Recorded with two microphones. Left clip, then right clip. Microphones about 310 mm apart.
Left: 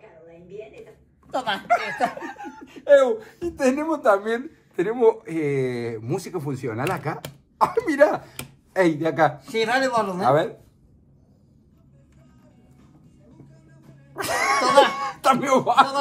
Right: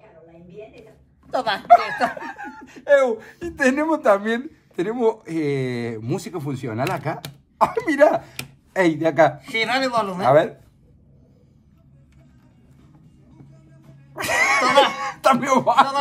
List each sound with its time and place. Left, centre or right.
1.8 s speech: right
2.3 s speech: right
3.4 s speech: right
4.2 s speech: right
4.8 s a man's voice: right
14.1 s a sound: right
15.3 s a man's voice: left